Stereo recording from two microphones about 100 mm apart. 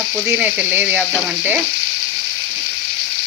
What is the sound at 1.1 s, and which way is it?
Frying, 5° right (ahead or behind).